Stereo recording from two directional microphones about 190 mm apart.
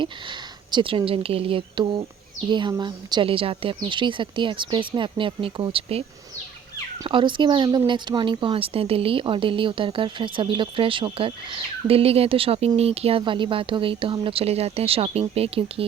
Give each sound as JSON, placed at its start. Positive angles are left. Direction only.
{"t": 0.0, "sound": "speech", "side_deg": -25}